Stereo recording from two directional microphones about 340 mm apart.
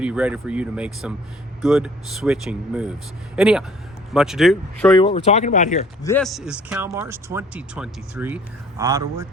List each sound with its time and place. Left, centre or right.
0.0 s speech: centre
4.9 s speech: centre
6.0 s speech: centre